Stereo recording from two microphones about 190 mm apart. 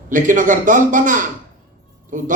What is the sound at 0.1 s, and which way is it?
A man's voice, 45° right (ahead or behind).